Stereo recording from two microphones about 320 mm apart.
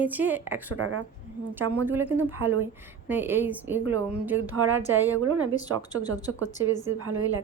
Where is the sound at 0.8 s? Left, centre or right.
Right.